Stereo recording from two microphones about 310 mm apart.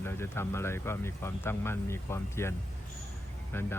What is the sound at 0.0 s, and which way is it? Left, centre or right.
Speech, centre.